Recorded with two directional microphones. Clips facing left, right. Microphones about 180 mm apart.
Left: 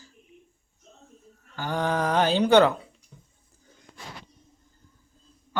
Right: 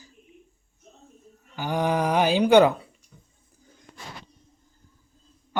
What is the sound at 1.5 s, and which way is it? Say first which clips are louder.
Speech: right 2 dB; 15° right (ahead or behind).